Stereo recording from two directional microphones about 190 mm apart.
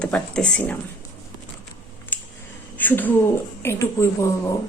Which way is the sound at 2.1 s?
10° left (ahead or behind).